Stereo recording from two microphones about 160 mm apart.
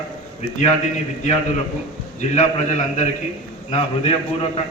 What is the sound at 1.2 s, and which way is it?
A man's voice, 45° left (ahead or behind).